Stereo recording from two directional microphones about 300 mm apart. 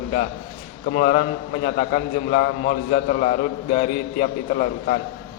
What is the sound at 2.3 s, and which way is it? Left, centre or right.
A man's voice, left.